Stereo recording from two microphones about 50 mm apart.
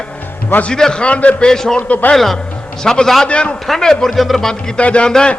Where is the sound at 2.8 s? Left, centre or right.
Centre.